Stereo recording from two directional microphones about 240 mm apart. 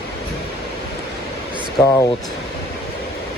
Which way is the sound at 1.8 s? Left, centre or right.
Centre.